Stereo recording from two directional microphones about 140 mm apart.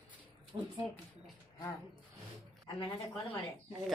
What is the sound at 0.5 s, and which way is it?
Speech, 35° right (ahead or behind).